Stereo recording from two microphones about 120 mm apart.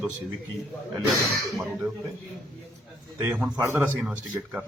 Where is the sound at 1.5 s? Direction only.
Centre (ahead or behind).